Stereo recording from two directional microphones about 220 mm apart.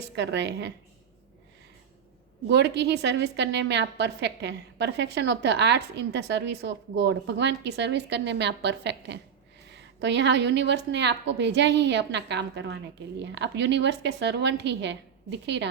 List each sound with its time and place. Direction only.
0.2 s a woman's voice: 50° right (ahead or behind)
2.5 s a woman's voice: 50° right (ahead or behind)